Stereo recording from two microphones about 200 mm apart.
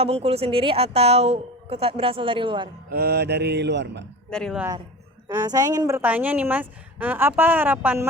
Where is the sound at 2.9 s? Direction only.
50° right (ahead or behind).